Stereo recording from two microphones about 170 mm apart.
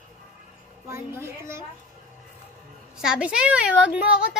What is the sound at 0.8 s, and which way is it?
Speech, 15° right (ahead or behind).